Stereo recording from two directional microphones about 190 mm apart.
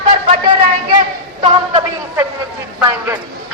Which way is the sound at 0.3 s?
25° right (ahead or behind).